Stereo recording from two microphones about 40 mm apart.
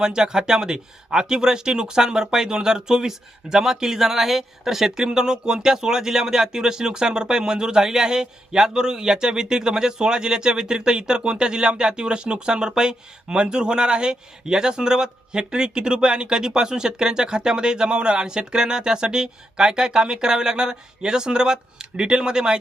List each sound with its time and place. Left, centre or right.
0.0 s speech: centre